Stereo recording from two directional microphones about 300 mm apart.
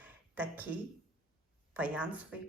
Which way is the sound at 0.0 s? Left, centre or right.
Centre.